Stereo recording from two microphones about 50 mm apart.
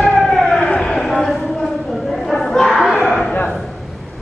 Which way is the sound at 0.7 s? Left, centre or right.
Centre.